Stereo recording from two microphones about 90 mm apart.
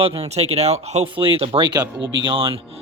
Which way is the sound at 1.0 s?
75° right (ahead or behind).